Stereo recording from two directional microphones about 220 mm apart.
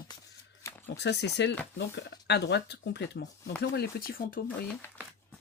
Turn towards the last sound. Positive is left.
turn(degrees=10)  # may be behind; listen again after turning